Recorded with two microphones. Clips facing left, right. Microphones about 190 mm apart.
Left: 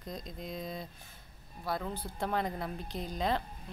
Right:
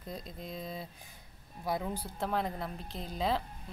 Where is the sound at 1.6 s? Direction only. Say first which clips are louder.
Right 2 dB; 15° right (ahead or behind).